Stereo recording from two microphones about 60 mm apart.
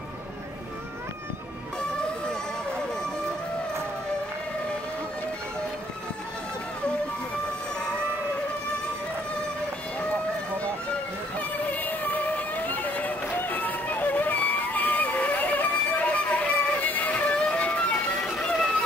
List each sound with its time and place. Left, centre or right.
11.7 s music: left
18.2 s run: centre